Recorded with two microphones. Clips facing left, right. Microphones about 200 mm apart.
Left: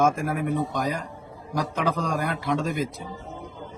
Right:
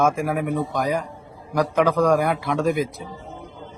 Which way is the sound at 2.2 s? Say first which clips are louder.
Right 4 dB; 10° right (ahead or behind).